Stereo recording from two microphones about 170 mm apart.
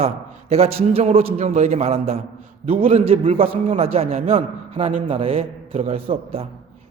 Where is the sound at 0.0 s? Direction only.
35° right (ahead or behind).